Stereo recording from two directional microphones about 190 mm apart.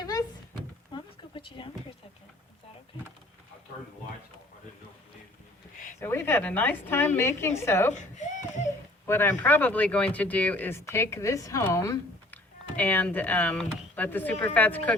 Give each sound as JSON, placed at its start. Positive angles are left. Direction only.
{"t": 0.0, "sound": "a sound", "side_deg": 20}
{"t": 6.0, "sound": "speech", "side_deg": 10}
{"t": 9.0, "sound": "speech", "side_deg": 10}